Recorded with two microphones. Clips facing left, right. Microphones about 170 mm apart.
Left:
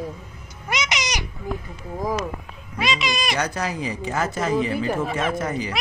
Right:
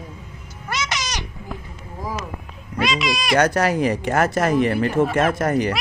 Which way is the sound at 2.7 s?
Centre (ahead or behind).